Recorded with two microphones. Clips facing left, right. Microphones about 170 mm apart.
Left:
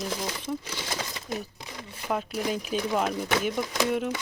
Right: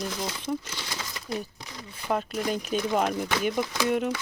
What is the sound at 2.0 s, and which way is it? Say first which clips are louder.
Speech: right 1 dB; 5° left (ahead or behind).